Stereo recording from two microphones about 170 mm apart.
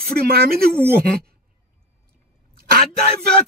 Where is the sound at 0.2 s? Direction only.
65° right (ahead or behind).